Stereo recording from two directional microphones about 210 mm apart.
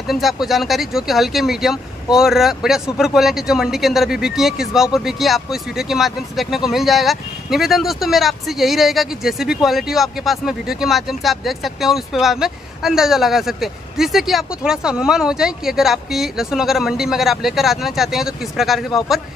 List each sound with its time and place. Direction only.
0.0 s speech: centre (ahead or behind)